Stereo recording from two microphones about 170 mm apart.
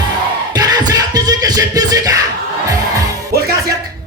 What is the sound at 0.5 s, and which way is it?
Music, 20° right (ahead or behind).